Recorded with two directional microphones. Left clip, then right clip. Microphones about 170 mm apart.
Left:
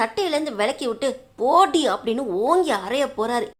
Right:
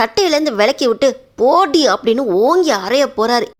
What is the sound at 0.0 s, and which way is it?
A woman's voice, 35° right (ahead or behind).